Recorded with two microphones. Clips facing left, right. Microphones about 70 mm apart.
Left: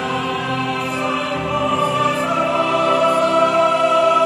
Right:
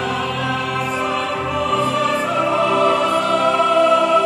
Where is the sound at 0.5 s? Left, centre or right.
Centre.